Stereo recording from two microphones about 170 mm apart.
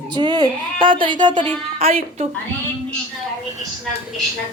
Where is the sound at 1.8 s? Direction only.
35° right (ahead or behind).